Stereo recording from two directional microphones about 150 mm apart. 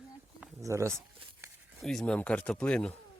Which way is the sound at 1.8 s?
Centre (ahead or behind).